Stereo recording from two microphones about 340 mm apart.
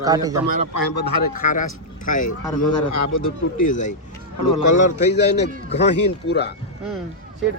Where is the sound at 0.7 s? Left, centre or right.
Left.